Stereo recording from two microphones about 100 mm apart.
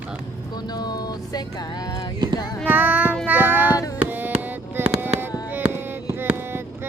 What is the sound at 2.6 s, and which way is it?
Child singing, 20° right (ahead or behind).